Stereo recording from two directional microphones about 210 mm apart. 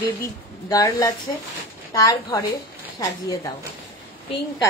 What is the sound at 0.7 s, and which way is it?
A woman's voice, 15° left (ahead or behind).